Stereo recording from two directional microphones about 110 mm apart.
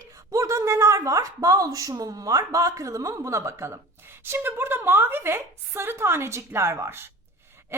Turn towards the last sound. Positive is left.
turn(degrees=-20)  # may be behind; listen again after turning